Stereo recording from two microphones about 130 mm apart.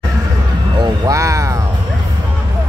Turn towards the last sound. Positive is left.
turn(degrees=-25)  # may be behind; listen again after turning